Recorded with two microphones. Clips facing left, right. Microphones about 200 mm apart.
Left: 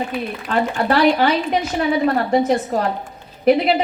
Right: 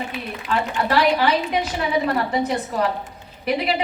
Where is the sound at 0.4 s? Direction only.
45° left (ahead or behind).